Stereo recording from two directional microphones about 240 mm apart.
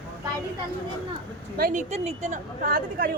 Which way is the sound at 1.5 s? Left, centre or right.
Right.